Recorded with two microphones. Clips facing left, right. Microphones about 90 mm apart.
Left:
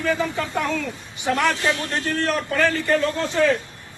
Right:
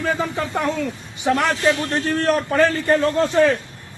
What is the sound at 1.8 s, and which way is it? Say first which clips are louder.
A man's voice: right 4 dB; 35° right (ahead or behind).